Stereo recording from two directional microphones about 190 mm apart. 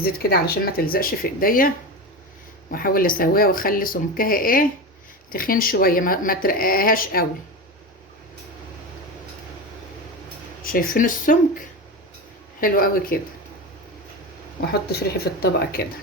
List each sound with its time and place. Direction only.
0.0 s speech: 55° left (ahead or behind)
2.7 s speech: 50° left (ahead or behind)
10.6 s speech: 50° left (ahead or behind)
14.7 s speech: 55° left (ahead or behind)